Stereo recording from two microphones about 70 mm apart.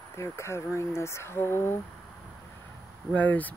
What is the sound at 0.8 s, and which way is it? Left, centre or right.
Speech, left.